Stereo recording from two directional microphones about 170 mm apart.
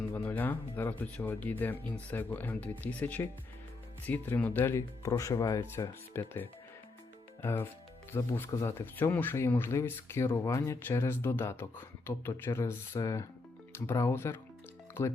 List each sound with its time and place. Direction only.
0.1 s speech: 15° left (ahead or behind)